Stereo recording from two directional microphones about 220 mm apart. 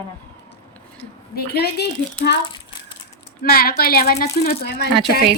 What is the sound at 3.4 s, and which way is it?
A woman's voice, 45° left (ahead or behind).